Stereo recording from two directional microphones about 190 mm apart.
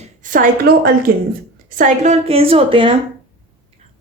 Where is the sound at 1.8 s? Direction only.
35° right (ahead or behind).